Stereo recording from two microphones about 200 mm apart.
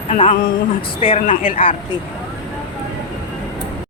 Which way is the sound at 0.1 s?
35° left (ahead or behind).